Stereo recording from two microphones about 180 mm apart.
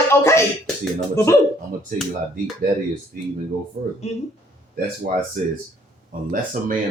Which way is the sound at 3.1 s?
50° right (ahead or behind).